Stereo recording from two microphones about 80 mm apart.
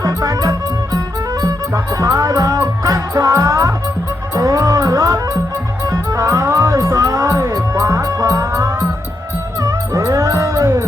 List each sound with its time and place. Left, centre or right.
0.0 s music: right